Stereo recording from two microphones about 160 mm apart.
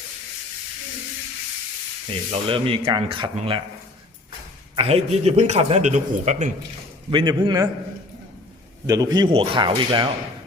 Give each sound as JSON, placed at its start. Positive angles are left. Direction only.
{"t": 2.3, "sound": "speech", "side_deg": -35}
{"t": 4.7, "sound": "a man's voice", "side_deg": -40}
{"t": 7.1, "sound": "speech", "side_deg": -30}
{"t": 8.9, "sound": "speech", "side_deg": -25}